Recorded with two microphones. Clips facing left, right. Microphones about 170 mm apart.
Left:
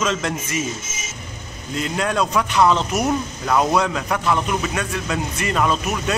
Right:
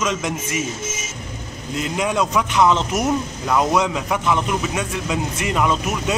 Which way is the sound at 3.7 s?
15° right (ahead or behind).